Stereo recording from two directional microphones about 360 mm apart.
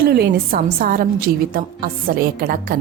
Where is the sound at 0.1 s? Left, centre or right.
Right.